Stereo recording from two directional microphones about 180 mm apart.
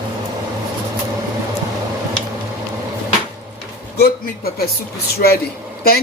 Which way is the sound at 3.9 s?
60° left (ahead or behind).